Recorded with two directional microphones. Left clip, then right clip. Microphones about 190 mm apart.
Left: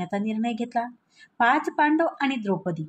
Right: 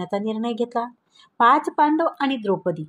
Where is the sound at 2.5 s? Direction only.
35° right (ahead or behind).